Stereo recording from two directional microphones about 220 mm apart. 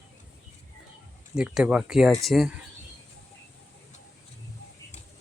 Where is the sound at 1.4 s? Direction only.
5° right (ahead or behind).